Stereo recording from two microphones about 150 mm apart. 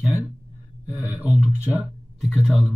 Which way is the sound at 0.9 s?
10° right (ahead or behind).